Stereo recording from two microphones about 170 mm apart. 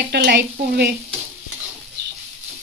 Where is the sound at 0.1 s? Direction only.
80° right.